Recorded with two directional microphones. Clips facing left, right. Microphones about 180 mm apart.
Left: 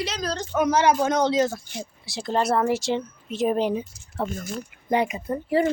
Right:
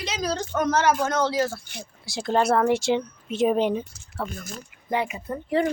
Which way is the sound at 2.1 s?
Centre (ahead or behind).